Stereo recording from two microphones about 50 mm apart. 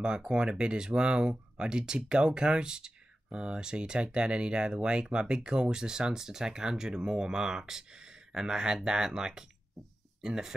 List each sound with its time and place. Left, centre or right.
0.0 s speech: centre
9.8 s speech: centre
10.2 s speech: centre